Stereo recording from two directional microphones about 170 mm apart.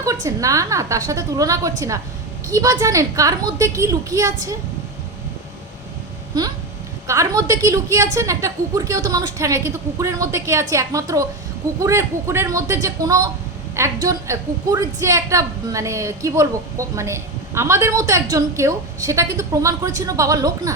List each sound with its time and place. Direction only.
0.0 s a woman's voice: 20° right (ahead or behind)
7.1 s a woman's voice: 20° right (ahead or behind)